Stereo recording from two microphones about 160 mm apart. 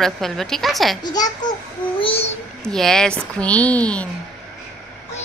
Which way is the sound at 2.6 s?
5° left (ahead or behind).